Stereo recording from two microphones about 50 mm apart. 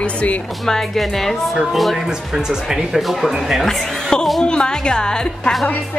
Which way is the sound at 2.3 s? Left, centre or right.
Centre.